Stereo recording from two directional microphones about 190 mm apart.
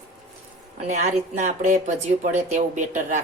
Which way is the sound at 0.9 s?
40° right (ahead or behind).